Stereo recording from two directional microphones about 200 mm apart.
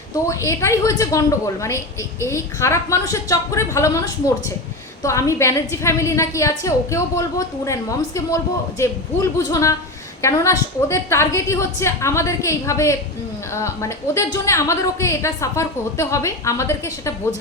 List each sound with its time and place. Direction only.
0.3 s a woman's voice: 15° left (ahead or behind)
9.4 s a woman's voice: 15° left (ahead or behind)